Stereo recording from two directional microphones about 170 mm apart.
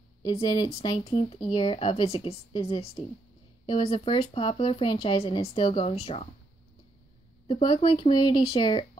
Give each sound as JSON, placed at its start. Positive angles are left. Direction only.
{"t": 0.2, "sound": "speech", "side_deg": 25}
{"t": 7.4, "sound": "speech", "side_deg": 30}